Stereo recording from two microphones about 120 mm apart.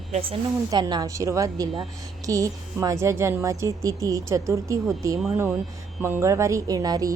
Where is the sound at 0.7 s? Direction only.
35° right (ahead or behind).